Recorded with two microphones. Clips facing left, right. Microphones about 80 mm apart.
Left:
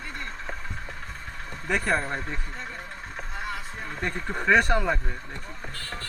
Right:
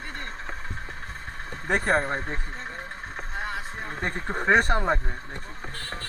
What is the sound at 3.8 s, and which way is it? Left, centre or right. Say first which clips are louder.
A man's voice: even; right.